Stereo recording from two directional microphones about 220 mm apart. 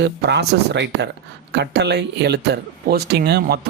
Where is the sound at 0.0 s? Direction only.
50° right (ahead or behind).